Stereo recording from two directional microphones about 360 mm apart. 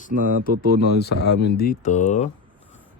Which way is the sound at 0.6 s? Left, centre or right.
Left.